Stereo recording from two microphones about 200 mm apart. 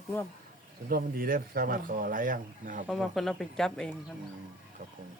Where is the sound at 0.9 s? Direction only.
50° right (ahead or behind).